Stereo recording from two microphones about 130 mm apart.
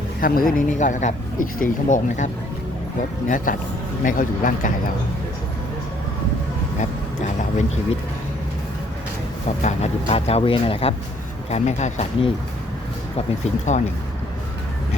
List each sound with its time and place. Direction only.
0.2 s speech: 90° left; by 2.3 s 75° left (ahead or behind)
3.2 s speech: 90° left
9.6 s speech: 55° left (ahead or behind)
11.5 s speech: 60° left (ahead or behind)
13.4 s speech: 65° left (ahead or behind)